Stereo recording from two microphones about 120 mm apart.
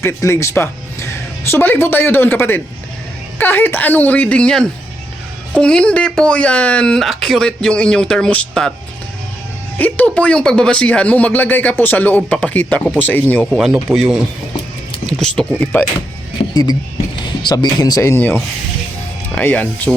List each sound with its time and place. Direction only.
0.0 s speech: 20° left (ahead or behind); by 8.7 s 5° left (ahead or behind)
9.7 s speech: 15° left (ahead or behind)
13.6 s speech: 5° right (ahead or behind)
15.5 s speech: 15° left (ahead or behind)
16.4 s music: 50° left (ahead or behind)
17.2 s speech: 40° left (ahead or behind); by 19.9 s 15° left (ahead or behind)